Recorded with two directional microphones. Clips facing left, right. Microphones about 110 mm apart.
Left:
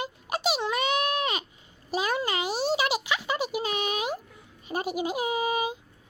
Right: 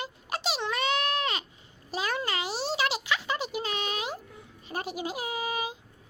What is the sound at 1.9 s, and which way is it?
Speech, 15° left (ahead or behind).